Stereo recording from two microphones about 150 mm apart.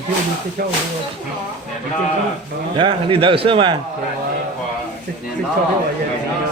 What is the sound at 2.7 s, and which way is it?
A man's voice, 35° right (ahead or behind).